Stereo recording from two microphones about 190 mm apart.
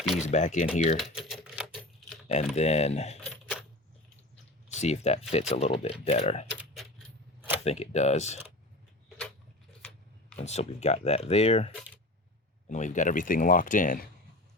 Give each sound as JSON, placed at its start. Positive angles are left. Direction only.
{"t": 0.2, "sound": "speech", "side_deg": 40}
{"t": 0.9, "sound": "typing", "side_deg": 0}
{"t": 2.2, "sound": "speech", "side_deg": 35}
{"t": 3.5, "sound": "coin", "side_deg": 0}
{"t": 4.7, "sound": "speech", "side_deg": 35}
{"t": 7.6, "sound": "speech", "side_deg": 35}
{"t": 10.4, "sound": "speech", "side_deg": 35}